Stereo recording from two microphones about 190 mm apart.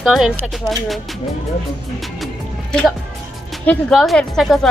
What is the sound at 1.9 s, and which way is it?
Music, centre (ahead or behind).